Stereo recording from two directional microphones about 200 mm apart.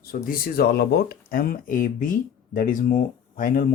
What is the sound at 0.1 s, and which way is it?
Speech, 45° left (ahead or behind).